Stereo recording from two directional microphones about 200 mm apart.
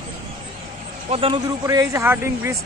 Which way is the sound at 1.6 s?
15° right (ahead or behind).